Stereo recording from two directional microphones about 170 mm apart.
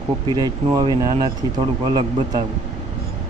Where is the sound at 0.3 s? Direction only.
25° right (ahead or behind).